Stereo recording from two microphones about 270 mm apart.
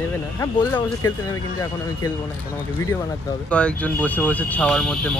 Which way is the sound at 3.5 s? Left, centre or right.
Centre.